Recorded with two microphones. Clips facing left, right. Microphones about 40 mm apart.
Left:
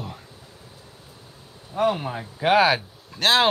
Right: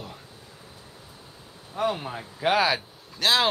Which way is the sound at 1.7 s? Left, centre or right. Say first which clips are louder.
Left 5 dB; centre.